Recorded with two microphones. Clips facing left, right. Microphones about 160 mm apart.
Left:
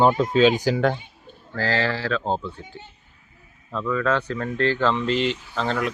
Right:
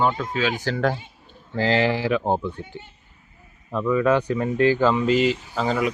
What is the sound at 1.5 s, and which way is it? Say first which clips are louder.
Speech: right 4 dB; 20° right (ahead or behind).